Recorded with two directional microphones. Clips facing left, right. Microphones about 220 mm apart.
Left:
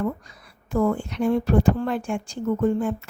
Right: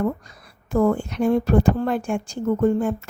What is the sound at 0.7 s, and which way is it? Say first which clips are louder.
A woman's voice: right 3 dB; 45° right (ahead or behind).